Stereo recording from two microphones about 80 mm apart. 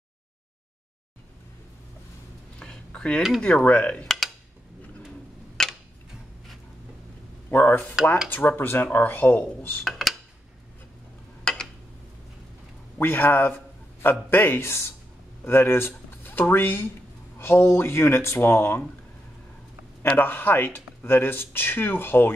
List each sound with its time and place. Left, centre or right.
2.6 s a sound: centre
3.3 s speech: centre
3.6 s speech: centre
5.6 s tick-tock: centre
7.5 s speech: left
9.8 s dishes: centre
11.5 s a sound: centre
12.9 s speech: left
20.2 s speech: left